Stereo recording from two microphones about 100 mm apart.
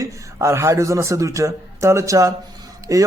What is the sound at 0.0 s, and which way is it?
A man's voice, 30° right (ahead or behind).